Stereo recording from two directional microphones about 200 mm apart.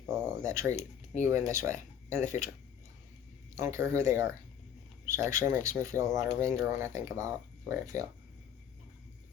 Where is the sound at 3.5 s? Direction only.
15° right (ahead or behind).